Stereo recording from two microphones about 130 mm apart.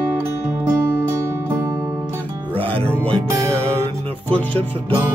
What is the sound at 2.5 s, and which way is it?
Music, 45° right (ahead or behind).